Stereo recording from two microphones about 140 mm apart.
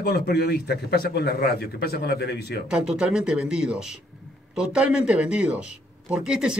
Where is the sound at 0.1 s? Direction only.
90° left.